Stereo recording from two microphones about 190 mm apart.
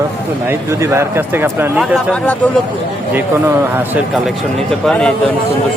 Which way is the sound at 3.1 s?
10° right (ahead or behind).